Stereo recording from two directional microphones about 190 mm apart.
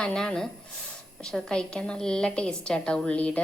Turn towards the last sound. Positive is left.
turn(degrees=5)  # may be behind; listen again after turning